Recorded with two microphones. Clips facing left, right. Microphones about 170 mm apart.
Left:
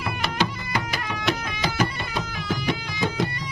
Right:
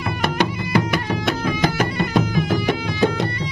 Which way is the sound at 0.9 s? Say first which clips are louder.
Right 5 dB; 55° right (ahead or behind).